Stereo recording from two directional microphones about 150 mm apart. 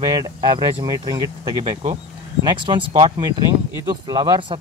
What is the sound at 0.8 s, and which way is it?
Speech, 25° right (ahead or behind).